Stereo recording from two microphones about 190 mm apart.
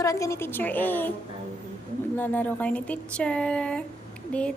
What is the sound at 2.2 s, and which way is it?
A woman's voice, 10° left (ahead or behind).